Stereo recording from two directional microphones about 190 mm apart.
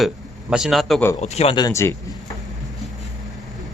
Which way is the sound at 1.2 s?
35° left (ahead or behind).